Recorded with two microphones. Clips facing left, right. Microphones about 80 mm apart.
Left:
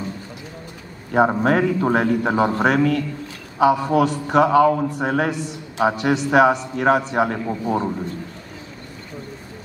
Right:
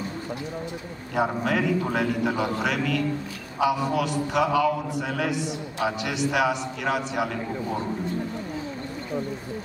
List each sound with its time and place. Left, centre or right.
1.1 s a man's voice: left